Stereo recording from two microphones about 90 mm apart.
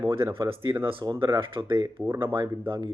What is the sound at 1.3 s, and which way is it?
A man's voice, 70° right (ahead or behind).